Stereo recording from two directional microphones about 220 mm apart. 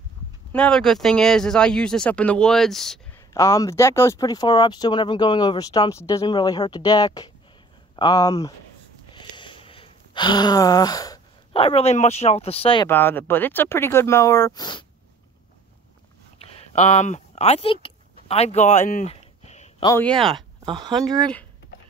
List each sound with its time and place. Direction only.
0.5 s speech: 5° left (ahead or behind)
3.3 s speech: 15° left (ahead or behind)
9.1 s a sound: 20° left (ahead or behind)
12.8 s speech: 10° left (ahead or behind)
16.3 s a sound: 25° left (ahead or behind)
19.8 s speech: 15° left (ahead or behind)
20.1 s speech: centre (ahead or behind)
20.6 s speech: 20° right (ahead or behind)
21.0 s speech: 5° left (ahead or behind)